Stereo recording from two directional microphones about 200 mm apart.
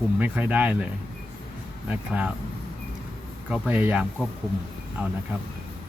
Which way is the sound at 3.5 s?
5° right (ahead or behind).